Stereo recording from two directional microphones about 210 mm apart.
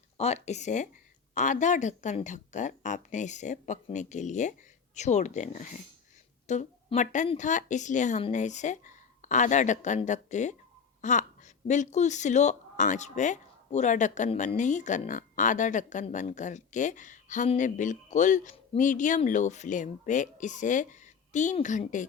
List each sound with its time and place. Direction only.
0.2 s speech: 30° left (ahead or behind)